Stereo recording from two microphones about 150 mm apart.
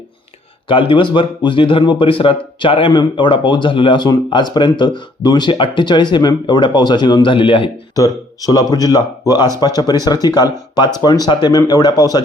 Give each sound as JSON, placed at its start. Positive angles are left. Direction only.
{"t": 0.7, "sound": "a man's voice", "side_deg": 35}
{"t": 7.9, "sound": "speech", "side_deg": 25}